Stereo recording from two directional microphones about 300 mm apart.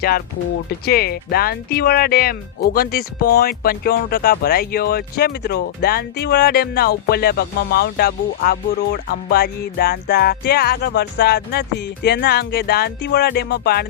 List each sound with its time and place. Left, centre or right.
0.7 s speech: left